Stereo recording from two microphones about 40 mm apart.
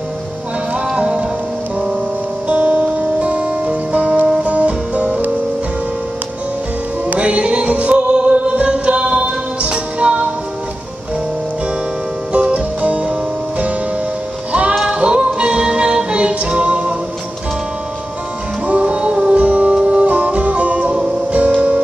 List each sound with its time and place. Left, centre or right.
0.9 s music: right
2.4 s music: right
7.2 s music: right
12.3 s music: right
18.7 s music: right
20.1 s music: right